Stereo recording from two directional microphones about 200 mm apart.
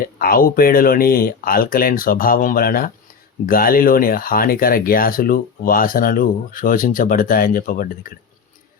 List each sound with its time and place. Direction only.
0.0 s speech: 45° left (ahead or behind)